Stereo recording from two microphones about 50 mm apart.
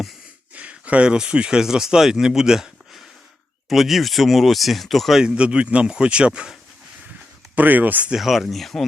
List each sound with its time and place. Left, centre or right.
0.5 s speech: right; by 5.2 s centre
5.2 s speech: right
7.5 s speech: right
8.2 s speech: centre